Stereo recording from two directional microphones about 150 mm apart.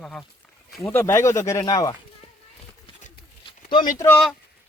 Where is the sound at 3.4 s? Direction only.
30° left (ahead or behind).